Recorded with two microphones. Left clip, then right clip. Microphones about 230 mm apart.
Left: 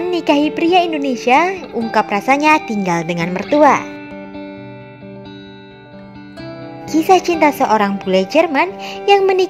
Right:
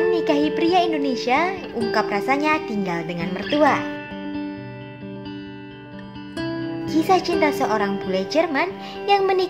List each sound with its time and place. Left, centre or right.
0.0 s speech: left
6.5 s speech: left